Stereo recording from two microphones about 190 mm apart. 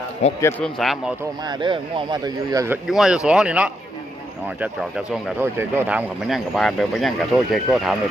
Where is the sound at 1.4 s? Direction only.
25° right (ahead or behind).